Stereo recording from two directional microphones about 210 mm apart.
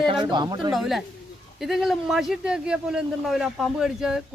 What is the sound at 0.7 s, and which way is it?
Speech, centre (ahead or behind).